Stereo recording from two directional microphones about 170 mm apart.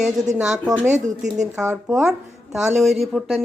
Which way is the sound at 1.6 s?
5° right (ahead or behind).